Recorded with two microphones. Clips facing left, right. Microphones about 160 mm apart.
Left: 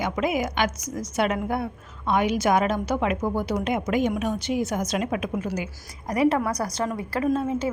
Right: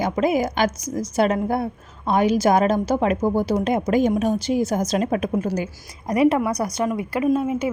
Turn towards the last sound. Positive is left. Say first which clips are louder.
# right 3 dB
turn(degrees=-15)  # may be behind; listen again after turning